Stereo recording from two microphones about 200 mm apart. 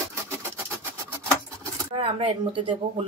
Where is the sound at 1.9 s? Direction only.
25° right (ahead or behind).